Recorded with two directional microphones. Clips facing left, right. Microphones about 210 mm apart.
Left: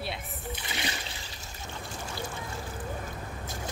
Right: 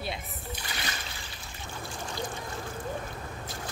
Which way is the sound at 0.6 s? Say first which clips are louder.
Left 3 dB; 20° left (ahead or behind).